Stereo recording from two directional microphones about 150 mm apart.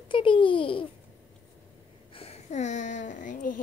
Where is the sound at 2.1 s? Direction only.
40° left (ahead or behind); by 3.6 s 60° left (ahead or behind).